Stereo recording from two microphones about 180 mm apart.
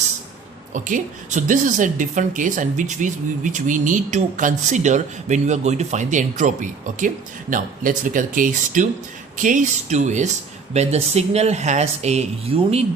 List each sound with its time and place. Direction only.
0.7 s speech: 45° right (ahead or behind)